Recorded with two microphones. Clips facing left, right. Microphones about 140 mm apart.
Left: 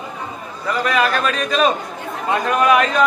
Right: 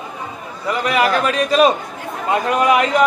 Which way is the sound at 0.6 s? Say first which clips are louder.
Right 1 dB; 20° right (ahead or behind).